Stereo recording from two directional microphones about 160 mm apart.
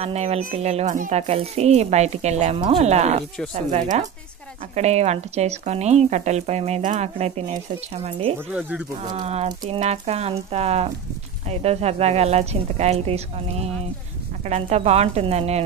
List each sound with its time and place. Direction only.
0.0 s speech: 40° right (ahead or behind)
4.7 s speech: 45° right (ahead or behind)
8.5 s speech: 5° right (ahead or behind)
9.1 s speech: 45° right (ahead or behind)